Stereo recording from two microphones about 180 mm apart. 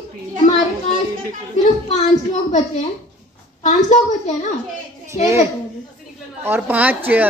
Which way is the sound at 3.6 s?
40° left (ahead or behind).